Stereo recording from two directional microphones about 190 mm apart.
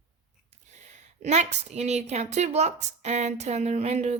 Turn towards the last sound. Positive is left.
turn(degrees=-35)  # may be behind; listen again after turning